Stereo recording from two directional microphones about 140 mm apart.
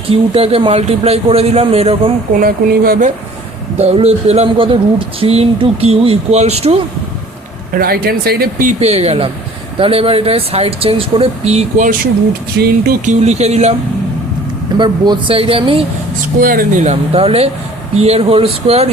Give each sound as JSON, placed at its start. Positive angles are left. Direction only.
{"t": 0.1, "sound": "speech", "side_deg": -45}
{"t": 2.4, "sound": "speech", "side_deg": -90}
{"t": 3.8, "sound": "speech", "side_deg": -50}
{"t": 7.7, "sound": "speech", "side_deg": -90}
{"t": 8.8, "sound": "speech", "side_deg": -45}
{"t": 12.6, "sound": "speech", "side_deg": -90}
{"t": 13.2, "sound": "speech", "side_deg": -50}
{"t": 14.8, "sound": "speech", "side_deg": -35}
{"t": 16.4, "sound": "speech", "side_deg": -90}